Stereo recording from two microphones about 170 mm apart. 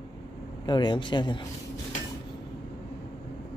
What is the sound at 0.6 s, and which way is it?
Speech, 25° left (ahead or behind).